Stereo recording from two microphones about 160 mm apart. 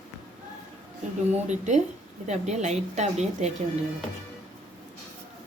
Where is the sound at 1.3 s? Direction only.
45° right (ahead or behind).